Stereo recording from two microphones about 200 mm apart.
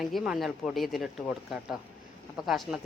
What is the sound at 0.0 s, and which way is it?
Speech, centre (ahead or behind).